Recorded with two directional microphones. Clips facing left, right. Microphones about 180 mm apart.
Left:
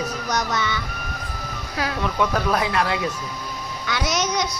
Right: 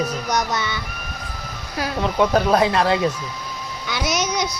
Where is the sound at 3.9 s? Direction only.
10° right (ahead or behind).